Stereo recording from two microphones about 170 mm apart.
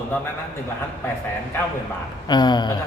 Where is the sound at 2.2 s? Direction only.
25° left (ahead or behind).